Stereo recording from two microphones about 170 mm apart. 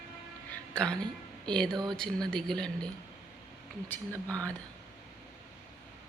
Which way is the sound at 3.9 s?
10° left (ahead or behind).